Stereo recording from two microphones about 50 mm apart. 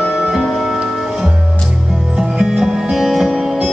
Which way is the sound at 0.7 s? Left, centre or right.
Centre.